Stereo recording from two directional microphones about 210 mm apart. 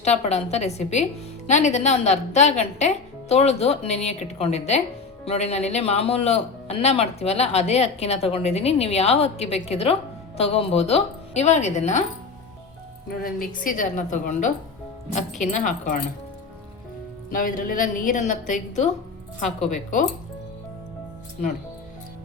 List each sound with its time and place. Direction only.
0.0 s a woman's voice: 30° left (ahead or behind)
13.1 s a woman's voice: 45° left (ahead or behind)
17.3 s a woman's voice: 40° left (ahead or behind)